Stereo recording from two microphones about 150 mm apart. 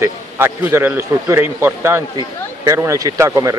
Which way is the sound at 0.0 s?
15° right (ahead or behind).